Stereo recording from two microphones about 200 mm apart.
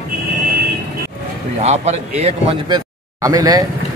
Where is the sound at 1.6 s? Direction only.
35° right (ahead or behind).